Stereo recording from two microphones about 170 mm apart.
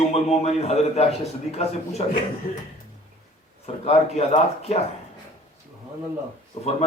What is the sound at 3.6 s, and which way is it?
A man's voice, 35° left (ahead or behind).